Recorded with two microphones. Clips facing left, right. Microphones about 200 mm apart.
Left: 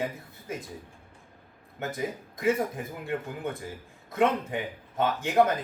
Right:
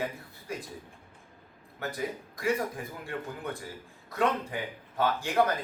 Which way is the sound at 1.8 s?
20° left (ahead or behind).